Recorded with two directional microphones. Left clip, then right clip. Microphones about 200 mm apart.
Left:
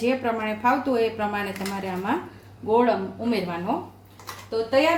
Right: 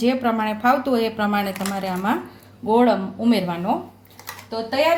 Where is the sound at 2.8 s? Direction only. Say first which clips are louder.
Right 3 dB; 45° right (ahead or behind).